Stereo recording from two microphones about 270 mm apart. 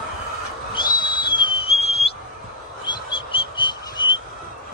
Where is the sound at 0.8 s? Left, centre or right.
Centre.